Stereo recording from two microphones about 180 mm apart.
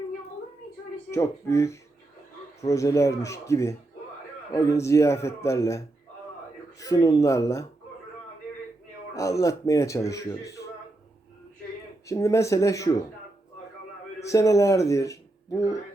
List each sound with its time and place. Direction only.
1.1 s speech: 15° left (ahead or behind)
9.1 s speech: 15° left (ahead or behind)
12.0 s speech: 15° left (ahead or behind)
14.3 s a man's voice: 15° left (ahead or behind)